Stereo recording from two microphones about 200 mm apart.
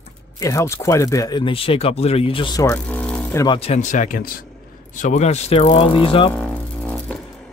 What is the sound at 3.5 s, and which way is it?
Speech, 35° left (ahead or behind).